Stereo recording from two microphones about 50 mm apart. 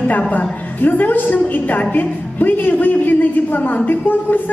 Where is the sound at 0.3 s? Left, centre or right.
Left.